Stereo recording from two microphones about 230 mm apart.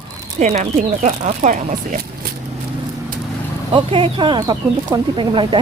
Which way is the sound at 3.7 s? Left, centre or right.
Right.